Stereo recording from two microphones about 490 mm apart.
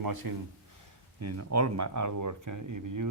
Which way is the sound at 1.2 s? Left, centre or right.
Right.